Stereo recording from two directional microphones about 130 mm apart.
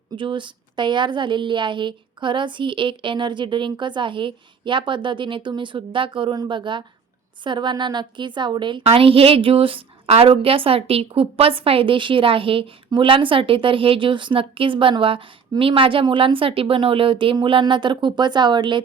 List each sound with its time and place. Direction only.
0.2 s a woman's voice: 40° right (ahead or behind)